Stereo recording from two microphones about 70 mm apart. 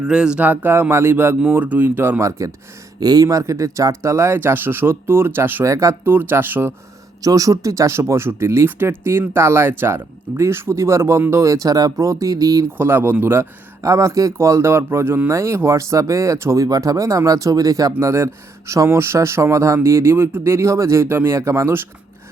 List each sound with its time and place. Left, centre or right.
0.0 s speech: centre
0.4 s speech: right
1.5 s speech: right
3.0 s speech: right
5.6 s speech: right
6.1 s speech: right
7.2 s speech: right
12.7 s speech: right
13.8 s speech: right
16.6 s speech: right
18.0 s speech: right